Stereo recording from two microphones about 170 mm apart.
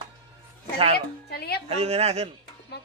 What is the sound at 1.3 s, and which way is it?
Speech, 65° left (ahead or behind).